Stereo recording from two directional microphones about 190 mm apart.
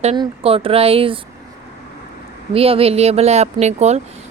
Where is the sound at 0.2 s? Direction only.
30° right (ahead or behind).